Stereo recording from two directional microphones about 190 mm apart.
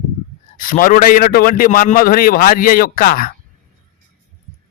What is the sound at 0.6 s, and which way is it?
A man's voice, 45° left (ahead or behind).